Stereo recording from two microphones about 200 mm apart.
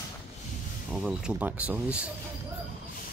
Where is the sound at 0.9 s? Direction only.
5° right (ahead or behind).